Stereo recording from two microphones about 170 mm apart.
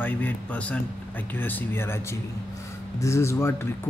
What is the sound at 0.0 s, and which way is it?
Speech, 10° left (ahead or behind).